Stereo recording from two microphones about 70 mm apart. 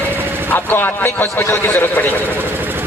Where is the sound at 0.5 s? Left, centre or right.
Left.